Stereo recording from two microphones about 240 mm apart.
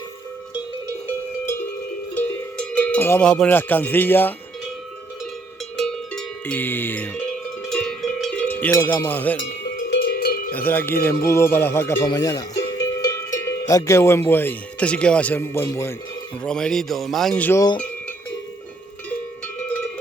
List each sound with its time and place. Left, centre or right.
2.1 s cowbell: centre
5.7 s cowbell: centre
9.7 s cowbell: left
10.5 s speech: centre
13.0 s cowbell: centre
16.4 s speech: centre